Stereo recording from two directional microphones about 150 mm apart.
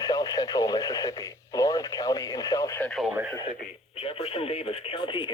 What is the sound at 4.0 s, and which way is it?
Radio, 40° left (ahead or behind).